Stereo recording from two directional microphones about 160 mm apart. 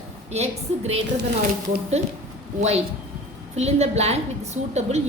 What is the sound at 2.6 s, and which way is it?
A woman's voice, 45° right (ahead or behind).